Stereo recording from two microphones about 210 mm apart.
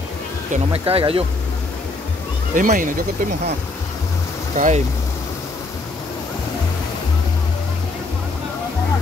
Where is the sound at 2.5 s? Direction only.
40° right (ahead or behind).